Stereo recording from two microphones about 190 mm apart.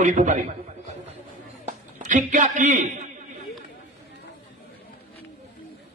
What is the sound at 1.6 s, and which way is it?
A man's voice, 40° right (ahead or behind).